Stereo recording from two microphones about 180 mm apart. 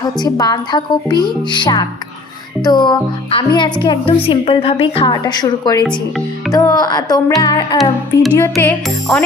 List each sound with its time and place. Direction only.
0.0 s a woman's voice: 20° left (ahead or behind)
7.8 s music: centre (ahead or behind)
8.4 s music: 15° left (ahead or behind)